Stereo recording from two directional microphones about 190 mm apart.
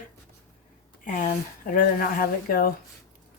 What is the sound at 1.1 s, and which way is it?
Speech, 45° left (ahead or behind).